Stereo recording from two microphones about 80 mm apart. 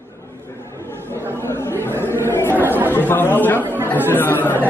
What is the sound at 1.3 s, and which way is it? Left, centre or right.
Chatter, left.